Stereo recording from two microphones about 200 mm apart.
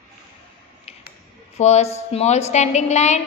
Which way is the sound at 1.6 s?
35° left (ahead or behind).